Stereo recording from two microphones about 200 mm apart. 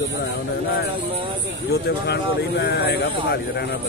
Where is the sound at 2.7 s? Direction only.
55° left (ahead or behind).